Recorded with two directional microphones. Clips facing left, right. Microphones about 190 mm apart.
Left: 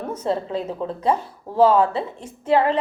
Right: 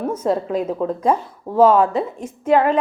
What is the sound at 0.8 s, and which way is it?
Speech, 45° right (ahead or behind).